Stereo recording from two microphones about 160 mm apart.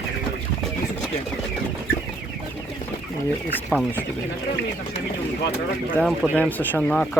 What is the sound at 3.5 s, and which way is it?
Speech, 10° left (ahead or behind).